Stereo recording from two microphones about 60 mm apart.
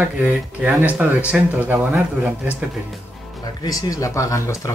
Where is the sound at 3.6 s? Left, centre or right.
Left.